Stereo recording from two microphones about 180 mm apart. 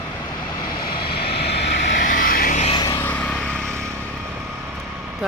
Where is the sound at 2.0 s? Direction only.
50° left (ahead or behind).